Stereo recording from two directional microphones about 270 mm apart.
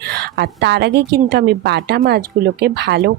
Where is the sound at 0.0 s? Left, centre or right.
Right.